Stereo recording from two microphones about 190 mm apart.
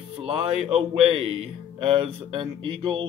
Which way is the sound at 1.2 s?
30° right (ahead or behind).